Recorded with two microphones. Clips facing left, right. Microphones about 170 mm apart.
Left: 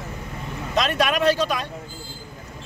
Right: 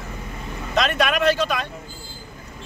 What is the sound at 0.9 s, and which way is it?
Speech, 35° left (ahead or behind).